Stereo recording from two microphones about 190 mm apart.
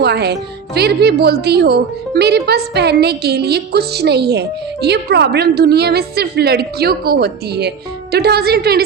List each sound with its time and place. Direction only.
0.0 s speech: 60° right (ahead or behind)